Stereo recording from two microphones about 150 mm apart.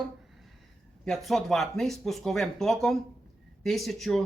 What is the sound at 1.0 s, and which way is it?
Speech, centre (ahead or behind).